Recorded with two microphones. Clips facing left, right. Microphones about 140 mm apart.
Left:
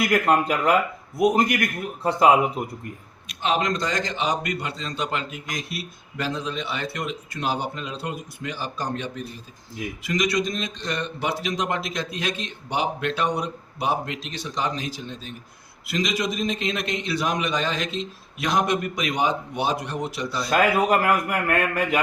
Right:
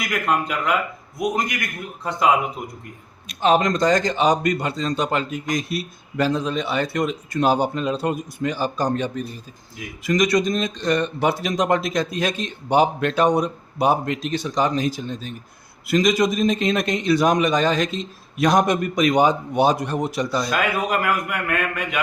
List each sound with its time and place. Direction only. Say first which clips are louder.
0.0 s a man's voice: left 3 dB; 35° left (ahead or behind)
3.2 s speech: right 6 dB; 40° right (ahead or behind)
20.5 s a man's voice: left 3 dB; 35° left (ahead or behind)